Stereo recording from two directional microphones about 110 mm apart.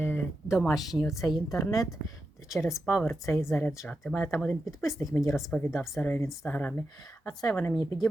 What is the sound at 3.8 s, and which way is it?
Speech, 5° left (ahead or behind).